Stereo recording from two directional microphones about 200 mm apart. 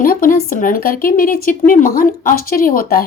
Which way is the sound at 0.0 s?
45° left (ahead or behind).